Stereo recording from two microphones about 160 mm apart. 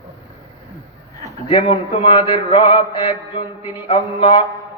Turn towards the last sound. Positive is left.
turn(degrees=30)  # may be behind; listen again after turning